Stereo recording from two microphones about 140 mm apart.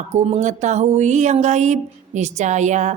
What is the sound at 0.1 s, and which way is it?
Speech, 55° right (ahead or behind).